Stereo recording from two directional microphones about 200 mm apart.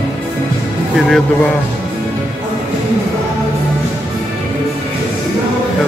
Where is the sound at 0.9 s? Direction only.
Centre (ahead or behind).